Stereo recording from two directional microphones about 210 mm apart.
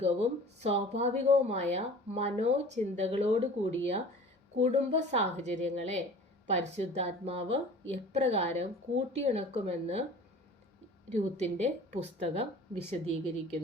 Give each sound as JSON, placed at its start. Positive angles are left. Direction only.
{"t": 0.0, "sound": "a woman's voice", "side_deg": -30}
{"t": 11.1, "sound": "a woman's voice", "side_deg": -30}